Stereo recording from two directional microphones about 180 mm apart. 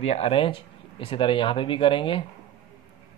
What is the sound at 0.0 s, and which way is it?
Speech, 35° left (ahead or behind).